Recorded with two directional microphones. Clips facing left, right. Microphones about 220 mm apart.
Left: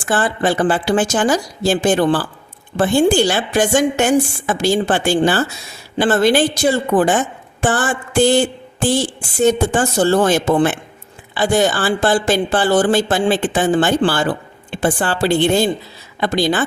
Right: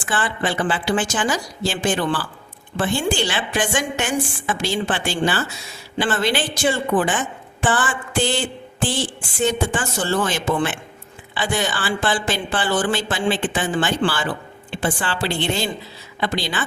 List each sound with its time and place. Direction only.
0.0 s a woman's voice: 40° left (ahead or behind)